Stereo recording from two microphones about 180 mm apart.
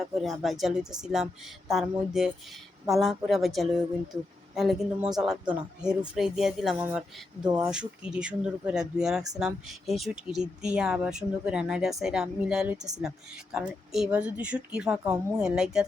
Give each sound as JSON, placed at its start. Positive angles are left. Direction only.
{"t": 0.0, "sound": "speech", "side_deg": 0}
{"t": 7.4, "sound": "speech", "side_deg": -20}
{"t": 7.7, "sound": "speech", "side_deg": -5}